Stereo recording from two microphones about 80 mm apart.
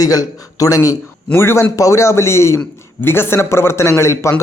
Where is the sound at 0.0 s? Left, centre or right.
Left.